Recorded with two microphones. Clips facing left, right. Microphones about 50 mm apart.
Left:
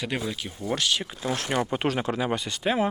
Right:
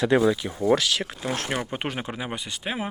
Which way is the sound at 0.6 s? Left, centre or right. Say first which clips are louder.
Right 5 dB; right.